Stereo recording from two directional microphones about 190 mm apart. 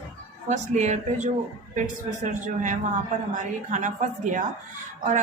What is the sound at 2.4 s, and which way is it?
A woman's voice, 40° right (ahead or behind).